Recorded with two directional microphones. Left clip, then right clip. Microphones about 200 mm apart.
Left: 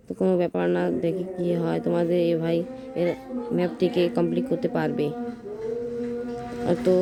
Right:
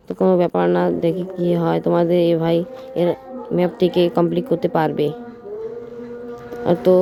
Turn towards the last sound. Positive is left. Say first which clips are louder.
# right 7 dB
turn(degrees=-20)  # may be behind; listen again after turning